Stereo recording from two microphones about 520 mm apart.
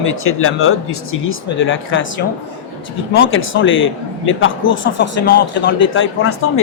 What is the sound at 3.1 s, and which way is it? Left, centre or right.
A man's voice, left.